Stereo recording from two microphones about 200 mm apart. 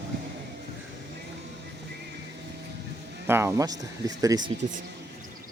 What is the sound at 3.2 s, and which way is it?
Speech, 10° right (ahead or behind).